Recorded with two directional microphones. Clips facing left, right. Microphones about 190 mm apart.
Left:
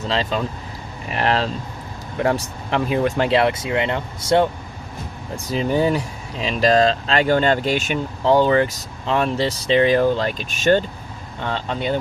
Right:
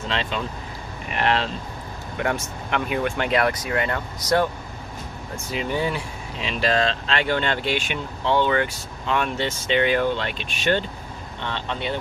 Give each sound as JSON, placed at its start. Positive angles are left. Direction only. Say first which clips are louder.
{"t": 0.1, "sound": "speech", "louder": "left 5 dB", "side_deg": 40}
{"t": 5.5, "sound": "speech", "louder": "left 6 dB", "side_deg": 40}